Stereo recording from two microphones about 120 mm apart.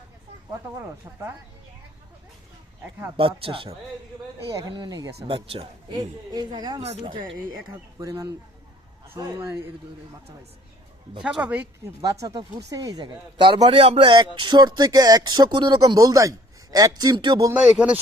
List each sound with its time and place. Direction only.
3.2 s speech: 50° right (ahead or behind)
4.4 s speech: 30° right (ahead or behind)
5.3 s speech: 45° right (ahead or behind)
6.8 s speech: 60° right (ahead or behind)
7.1 s speech: 45° right (ahead or behind)
7.9 s speech: 30° right (ahead or behind)
11.2 s speech: 5° right (ahead or behind)
12.0 s speech: 35° right (ahead or behind)
16.0 s speech: 25° right (ahead or behind)
17.5 s speech: 10° right (ahead or behind)